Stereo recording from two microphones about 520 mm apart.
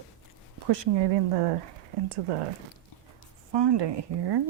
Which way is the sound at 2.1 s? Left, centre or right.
Right.